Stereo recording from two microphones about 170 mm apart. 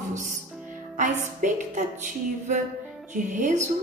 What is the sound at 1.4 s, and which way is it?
Speech, 45° right (ahead or behind).